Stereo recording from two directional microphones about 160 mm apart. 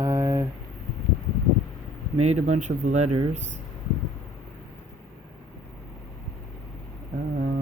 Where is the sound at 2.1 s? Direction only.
45° right (ahead or behind).